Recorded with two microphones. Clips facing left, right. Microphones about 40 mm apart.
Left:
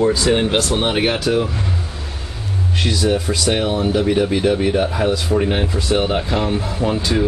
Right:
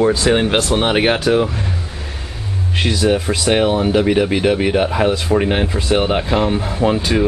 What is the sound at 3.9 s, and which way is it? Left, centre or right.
Speech, right.